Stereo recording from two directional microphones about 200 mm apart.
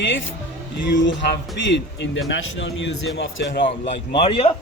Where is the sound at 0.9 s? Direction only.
65° left (ahead or behind).